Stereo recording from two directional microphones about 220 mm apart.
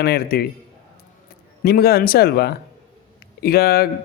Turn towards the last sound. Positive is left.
turn(degrees=45)  # may be behind; listen again after turning